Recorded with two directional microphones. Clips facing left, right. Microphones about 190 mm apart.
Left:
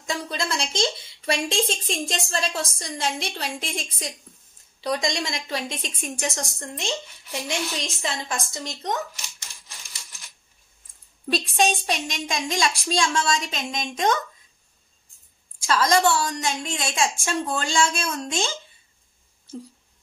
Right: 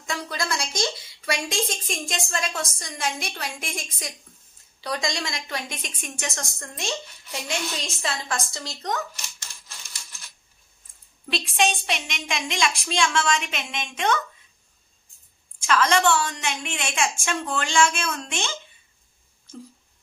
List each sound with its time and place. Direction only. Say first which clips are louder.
0.1 s a woman's voice: left 1 dB; 25° left (ahead or behind)
8.0 s a woman's voice: right 2 dB; 15° left (ahead or behind)
11.2 s a woman's voice: left 2 dB; 40° left (ahead or behind)
15.6 s a woman's voice: left 1 dB; 35° left (ahead or behind)